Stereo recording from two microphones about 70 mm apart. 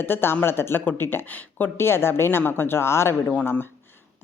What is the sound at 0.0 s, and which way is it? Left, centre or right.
Speech, left.